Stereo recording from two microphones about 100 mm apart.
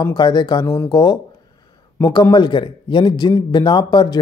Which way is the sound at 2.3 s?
50° left (ahead or behind).